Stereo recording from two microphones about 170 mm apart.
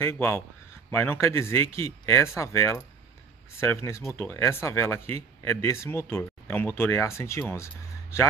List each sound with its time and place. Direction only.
0.0 s speech: 15° left (ahead or behind)